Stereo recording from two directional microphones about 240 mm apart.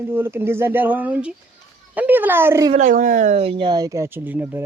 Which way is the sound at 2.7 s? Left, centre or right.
Right.